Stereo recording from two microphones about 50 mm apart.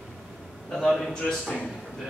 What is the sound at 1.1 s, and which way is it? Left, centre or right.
Speech, centre.